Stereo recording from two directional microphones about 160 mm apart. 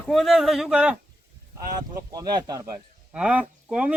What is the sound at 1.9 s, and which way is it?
Speech, 25° right (ahead or behind).